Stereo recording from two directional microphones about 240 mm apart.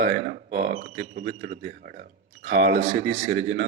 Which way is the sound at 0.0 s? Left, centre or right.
Right.